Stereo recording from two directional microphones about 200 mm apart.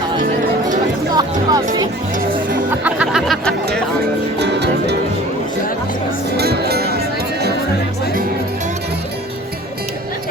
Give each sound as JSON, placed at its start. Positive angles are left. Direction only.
{"t": 1.1, "sound": "speech", "side_deg": -20}
{"t": 2.1, "sound": "music", "side_deg": -45}
{"t": 2.8, "sound": "speech", "side_deg": -5}
{"t": 4.4, "sound": "music", "side_deg": -55}
{"t": 6.3, "sound": "music", "side_deg": -55}